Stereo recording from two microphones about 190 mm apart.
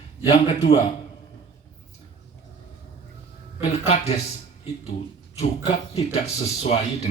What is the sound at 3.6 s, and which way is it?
Speech, 35° left (ahead or behind).